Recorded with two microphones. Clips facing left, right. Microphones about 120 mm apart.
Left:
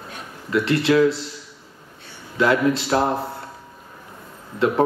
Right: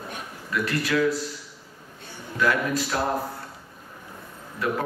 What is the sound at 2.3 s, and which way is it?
Speech, 25° left (ahead or behind).